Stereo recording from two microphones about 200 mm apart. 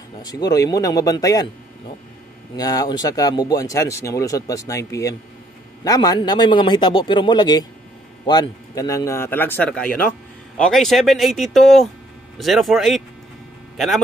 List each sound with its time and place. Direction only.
0.2 s a man's voice: 20° left (ahead or behind)
2.5 s a man's voice: 20° left (ahead or behind); by 14.0 s centre (ahead or behind)